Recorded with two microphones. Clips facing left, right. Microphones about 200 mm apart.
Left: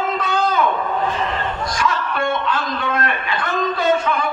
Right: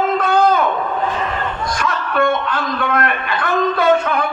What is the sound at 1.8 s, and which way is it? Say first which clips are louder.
A man's voice: right 3 dB; 55° right (ahead or behind).